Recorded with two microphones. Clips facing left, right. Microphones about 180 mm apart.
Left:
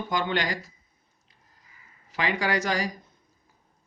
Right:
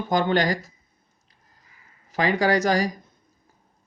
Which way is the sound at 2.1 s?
40° right (ahead or behind).